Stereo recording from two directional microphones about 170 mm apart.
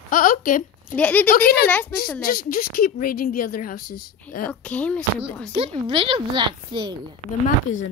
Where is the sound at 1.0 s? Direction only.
10° left (ahead or behind).